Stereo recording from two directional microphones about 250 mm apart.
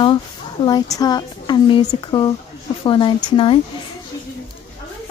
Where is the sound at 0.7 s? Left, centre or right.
Centre.